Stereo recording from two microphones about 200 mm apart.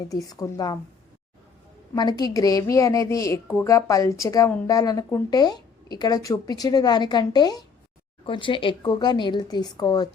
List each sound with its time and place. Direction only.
0.1 s a woman's voice: 15° left (ahead or behind)
2.0 s a woman's voice: 20° left (ahead or behind)